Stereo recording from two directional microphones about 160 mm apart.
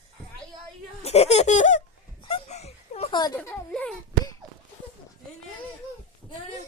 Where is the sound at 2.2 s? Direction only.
40° left (ahead or behind).